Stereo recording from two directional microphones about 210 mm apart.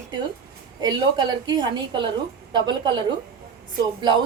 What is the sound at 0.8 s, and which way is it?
A woman's voice, 20° right (ahead or behind).